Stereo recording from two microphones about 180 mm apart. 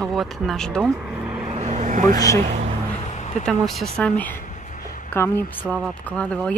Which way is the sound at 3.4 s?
Centre (ahead or behind).